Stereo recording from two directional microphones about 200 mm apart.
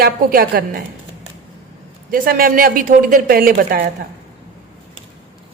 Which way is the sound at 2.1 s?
45° right (ahead or behind).